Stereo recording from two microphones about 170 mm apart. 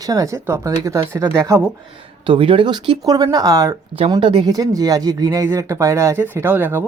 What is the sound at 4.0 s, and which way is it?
Speech, 30° right (ahead or behind).